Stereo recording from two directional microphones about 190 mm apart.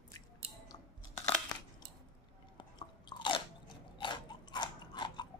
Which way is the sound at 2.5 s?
25° left (ahead or behind).